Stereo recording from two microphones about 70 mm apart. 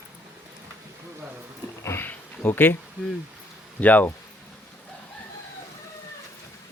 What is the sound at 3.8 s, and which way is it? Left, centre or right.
Speech, left.